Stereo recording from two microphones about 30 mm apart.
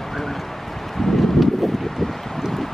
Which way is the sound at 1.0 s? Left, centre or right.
Centre.